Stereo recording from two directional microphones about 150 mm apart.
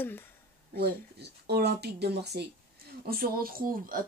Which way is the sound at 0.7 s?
90° right.